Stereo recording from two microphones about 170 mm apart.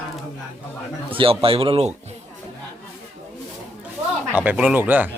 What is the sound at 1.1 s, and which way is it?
Speech, 35° right (ahead or behind).